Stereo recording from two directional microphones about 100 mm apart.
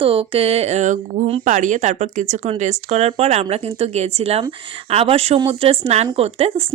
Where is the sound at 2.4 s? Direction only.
90° right.